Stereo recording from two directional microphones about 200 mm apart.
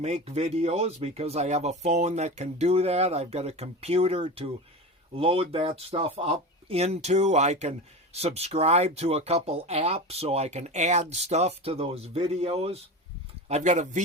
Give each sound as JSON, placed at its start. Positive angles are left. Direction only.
{"t": 0.0, "sound": "speech", "side_deg": -35}